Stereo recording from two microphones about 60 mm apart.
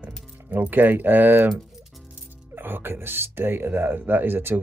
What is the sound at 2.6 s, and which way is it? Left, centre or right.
Speech, right.